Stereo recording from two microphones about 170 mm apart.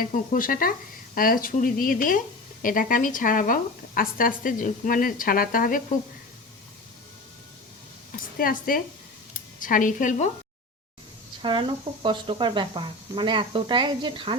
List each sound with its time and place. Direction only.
0.0 s speech: 50° left (ahead or behind)
8.4 s a woman's voice: 55° left (ahead or behind)
11.4 s speech: 30° right (ahead or behind)